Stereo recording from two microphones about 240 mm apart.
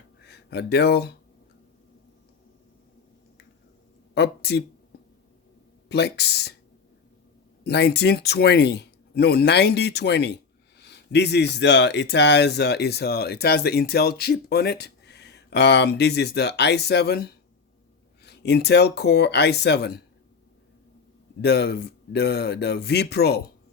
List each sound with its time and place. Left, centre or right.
0.3 s speech: left
4.1 s speech: left
5.9 s speech: left
7.6 s speech: left
21.4 s speech: left